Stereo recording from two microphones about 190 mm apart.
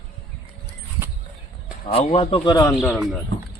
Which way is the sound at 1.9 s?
35° left (ahead or behind).